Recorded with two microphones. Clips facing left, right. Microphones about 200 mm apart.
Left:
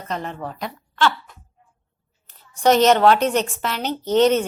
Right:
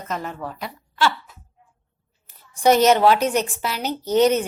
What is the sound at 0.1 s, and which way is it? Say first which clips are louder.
Speech: left 1 dB; 30° left (ahead or behind).